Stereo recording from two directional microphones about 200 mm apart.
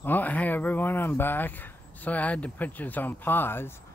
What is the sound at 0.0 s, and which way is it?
Speech, 10° left (ahead or behind).